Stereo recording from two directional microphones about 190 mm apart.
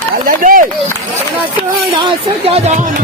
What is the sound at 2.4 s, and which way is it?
Speech, 30° right (ahead or behind).